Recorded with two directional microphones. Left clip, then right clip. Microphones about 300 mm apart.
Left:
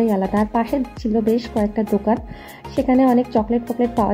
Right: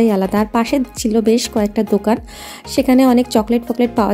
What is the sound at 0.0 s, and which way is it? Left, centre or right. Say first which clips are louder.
Speech: right 4 dB; right.